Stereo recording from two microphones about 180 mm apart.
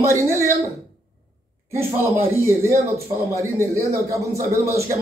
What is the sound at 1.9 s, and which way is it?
A man's voice, 15° right (ahead or behind).